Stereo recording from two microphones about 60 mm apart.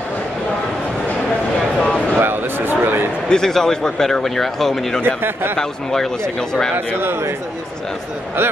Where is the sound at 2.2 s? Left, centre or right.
Right.